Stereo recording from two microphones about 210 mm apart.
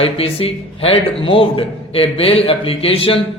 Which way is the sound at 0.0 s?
25° left (ahead or behind).